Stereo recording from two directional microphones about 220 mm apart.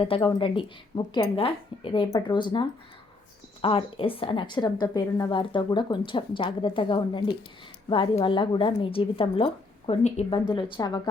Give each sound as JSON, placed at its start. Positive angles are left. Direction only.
{"t": 0.0, "sound": "a woman's voice", "side_deg": 20}